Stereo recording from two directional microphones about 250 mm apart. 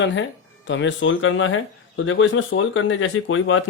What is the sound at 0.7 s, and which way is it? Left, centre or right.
Speech, left.